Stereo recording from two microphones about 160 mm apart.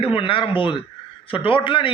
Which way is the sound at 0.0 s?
35° left (ahead or behind).